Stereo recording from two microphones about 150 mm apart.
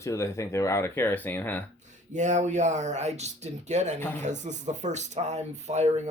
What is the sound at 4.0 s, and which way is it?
Speech, 15° left (ahead or behind).